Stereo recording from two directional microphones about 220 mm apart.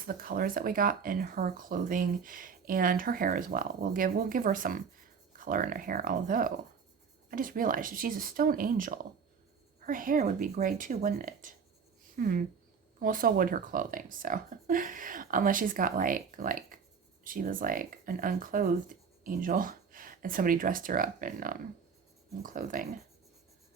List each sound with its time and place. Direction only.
0.1 s speech: 40° right (ahead or behind)